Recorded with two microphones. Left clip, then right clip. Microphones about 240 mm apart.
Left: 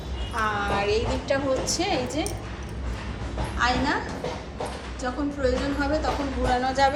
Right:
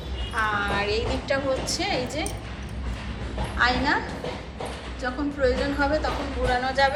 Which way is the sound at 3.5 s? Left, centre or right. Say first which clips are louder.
Right 2 dB; centre.